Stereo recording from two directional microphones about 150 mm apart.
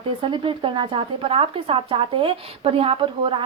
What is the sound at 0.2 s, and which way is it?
Speech, 35° right (ahead or behind).